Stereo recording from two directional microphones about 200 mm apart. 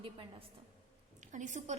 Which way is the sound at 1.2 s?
40° right (ahead or behind).